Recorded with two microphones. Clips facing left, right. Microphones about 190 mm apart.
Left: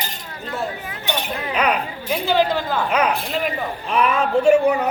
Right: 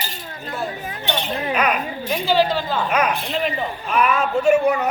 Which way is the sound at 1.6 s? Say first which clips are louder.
Left 2 dB; 30° left (ahead or behind).